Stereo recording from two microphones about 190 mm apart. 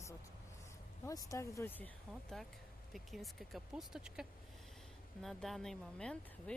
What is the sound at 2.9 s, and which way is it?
Speech, centre (ahead or behind).